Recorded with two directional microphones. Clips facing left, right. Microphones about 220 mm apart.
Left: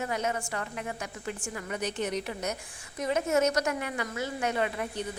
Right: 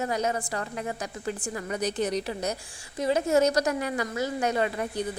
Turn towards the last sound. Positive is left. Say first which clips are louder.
# right 3 dB
turn(degrees=-35)  # may be behind; listen again after turning